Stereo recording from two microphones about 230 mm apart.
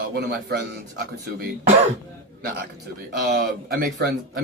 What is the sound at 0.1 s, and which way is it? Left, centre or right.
A man's voice, right.